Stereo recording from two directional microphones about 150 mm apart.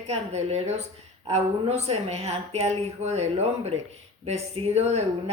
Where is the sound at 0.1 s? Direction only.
45° right (ahead or behind).